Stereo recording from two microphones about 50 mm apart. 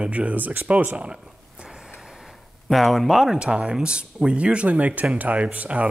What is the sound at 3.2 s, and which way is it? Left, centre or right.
Speech, centre.